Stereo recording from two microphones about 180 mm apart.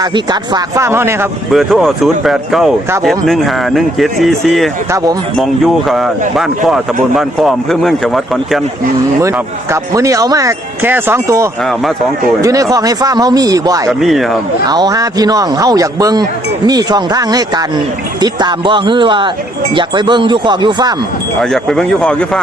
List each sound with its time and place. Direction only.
0.0 s speech: 20° right (ahead or behind)
1.5 s speech: centre (ahead or behind)
9.9 s speech: 20° right (ahead or behind)
14.0 s speech: centre (ahead or behind)
14.7 s speech: 20° right (ahead or behind)
21.5 s speech: centre (ahead or behind)